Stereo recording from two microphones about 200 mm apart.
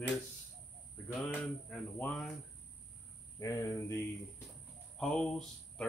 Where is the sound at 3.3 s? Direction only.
15° left (ahead or behind).